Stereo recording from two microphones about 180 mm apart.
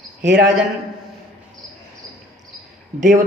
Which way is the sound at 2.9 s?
45° right (ahead or behind).